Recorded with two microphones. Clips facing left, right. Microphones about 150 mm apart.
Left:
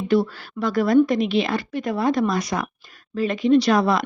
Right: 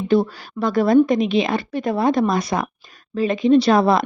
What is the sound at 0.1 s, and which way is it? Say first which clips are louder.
A woman's voice: right 2 dB; 20° right (ahead or behind).